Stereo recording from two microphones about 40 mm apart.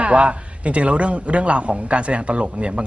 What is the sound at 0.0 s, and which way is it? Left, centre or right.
Speech, right.